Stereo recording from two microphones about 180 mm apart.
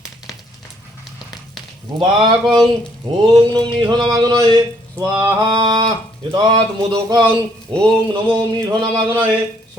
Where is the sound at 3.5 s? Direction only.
25° right (ahead or behind).